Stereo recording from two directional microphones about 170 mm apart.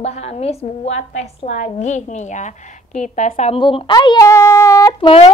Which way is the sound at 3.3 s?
35° left (ahead or behind).